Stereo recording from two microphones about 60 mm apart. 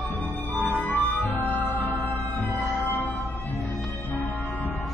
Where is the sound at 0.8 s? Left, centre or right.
Left.